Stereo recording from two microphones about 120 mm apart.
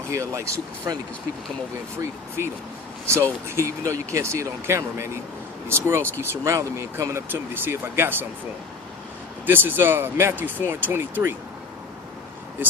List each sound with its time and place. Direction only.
0.1 s speech: 25° right (ahead or behind)
2.0 s speech: 20° right (ahead or behind)
9.5 s speech: 15° right (ahead or behind)